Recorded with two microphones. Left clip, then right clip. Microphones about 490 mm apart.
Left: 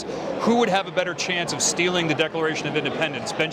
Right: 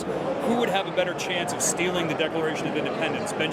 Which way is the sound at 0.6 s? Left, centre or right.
Left.